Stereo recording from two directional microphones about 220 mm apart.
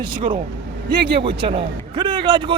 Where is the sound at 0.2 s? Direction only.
20° right (ahead or behind).